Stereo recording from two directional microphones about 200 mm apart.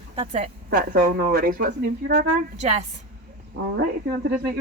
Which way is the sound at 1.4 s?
50° right (ahead or behind).